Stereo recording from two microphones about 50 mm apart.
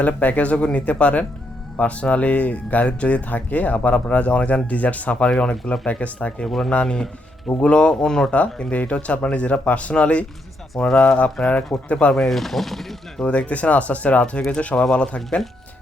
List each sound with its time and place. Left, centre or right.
0.0 s speech: left; by 8.3 s centre
8.3 s speech: left
12.1 s speech: centre
13.2 s speech: left